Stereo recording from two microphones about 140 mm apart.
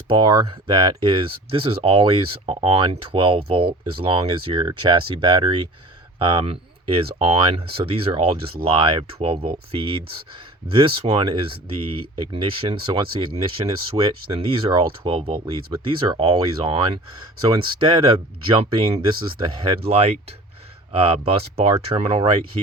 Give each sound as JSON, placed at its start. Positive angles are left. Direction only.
{"t": 0.1, "sound": "speech", "side_deg": -30}
{"t": 20.9, "sound": "speech", "side_deg": -40}